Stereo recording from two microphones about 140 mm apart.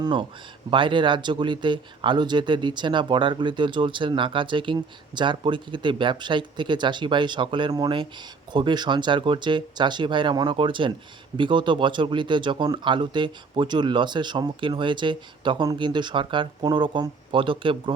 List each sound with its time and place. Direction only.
0.0 s speech: 35° right (ahead or behind)